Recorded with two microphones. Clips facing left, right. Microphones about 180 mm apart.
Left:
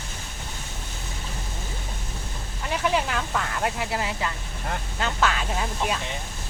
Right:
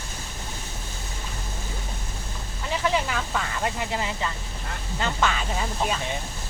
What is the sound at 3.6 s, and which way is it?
Speech, 5° left (ahead or behind).